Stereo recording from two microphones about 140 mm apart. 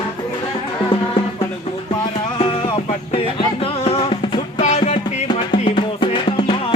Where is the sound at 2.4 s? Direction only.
40° left (ahead or behind).